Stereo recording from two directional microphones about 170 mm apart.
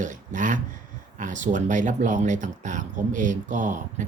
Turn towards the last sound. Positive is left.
turn(degrees=-45)  # may be behind; listen again after turning